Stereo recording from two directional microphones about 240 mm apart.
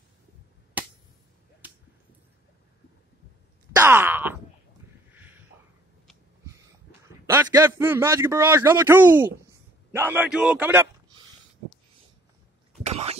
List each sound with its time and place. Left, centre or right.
3.7 s groan: centre
7.2 s a man's voice: centre
12.8 s a sound: right